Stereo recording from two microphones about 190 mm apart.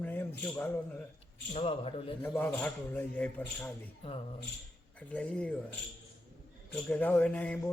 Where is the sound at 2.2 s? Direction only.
10° left (ahead or behind).